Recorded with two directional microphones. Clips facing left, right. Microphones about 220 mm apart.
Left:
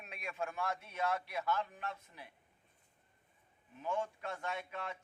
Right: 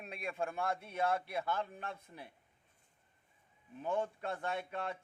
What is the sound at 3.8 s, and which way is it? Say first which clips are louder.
Speech: right 2 dB; 35° right (ahead or behind).